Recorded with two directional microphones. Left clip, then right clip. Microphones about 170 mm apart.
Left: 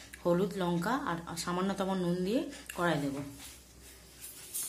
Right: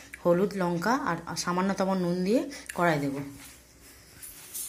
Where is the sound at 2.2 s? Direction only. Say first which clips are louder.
Right 6 dB; 30° right (ahead or behind).